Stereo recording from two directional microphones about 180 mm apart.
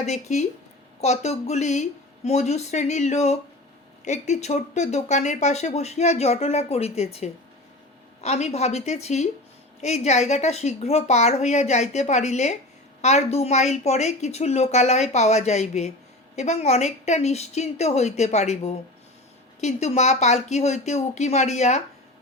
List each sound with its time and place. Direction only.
0.0 s speech: 40° left (ahead or behind)